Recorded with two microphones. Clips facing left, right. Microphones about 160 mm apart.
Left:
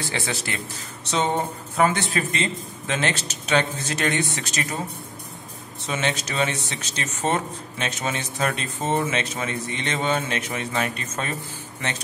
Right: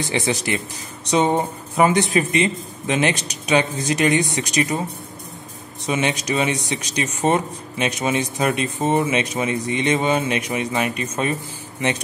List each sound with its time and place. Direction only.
0.0 s speech: 15° right (ahead or behind)
5.9 s speech: 15° right (ahead or behind)